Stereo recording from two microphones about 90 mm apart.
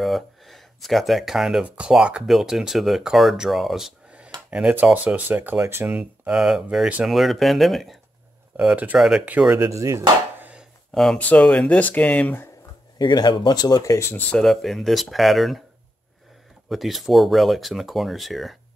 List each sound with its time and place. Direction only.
0.0 s speech: centre (ahead or behind); by 5.9 s 25° right (ahead or behind)
5.9 s speech: 15° right (ahead or behind)
8.5 s speech: 15° right (ahead or behind)
9.6 s chopping: 35° right (ahead or behind)
11.1 s speech: 15° left (ahead or behind)
13.0 s speech: 55° left (ahead or behind)
14.3 s speech: 5° left (ahead or behind)
16.6 s speech: centre (ahead or behind)